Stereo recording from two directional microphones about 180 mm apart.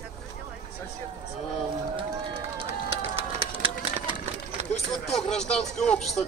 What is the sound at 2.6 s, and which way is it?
Run, 35° right (ahead or behind).